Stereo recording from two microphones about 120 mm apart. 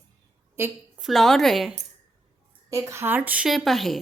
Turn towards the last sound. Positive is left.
turn(degrees=0)  # may be behind; listen again after turning